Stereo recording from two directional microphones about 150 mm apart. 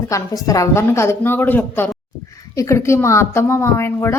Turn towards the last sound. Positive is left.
turn(degrees=15)  # may be behind; listen again after turning